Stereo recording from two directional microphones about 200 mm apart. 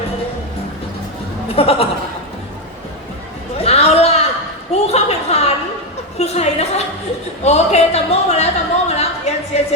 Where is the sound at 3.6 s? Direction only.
30° left (ahead or behind).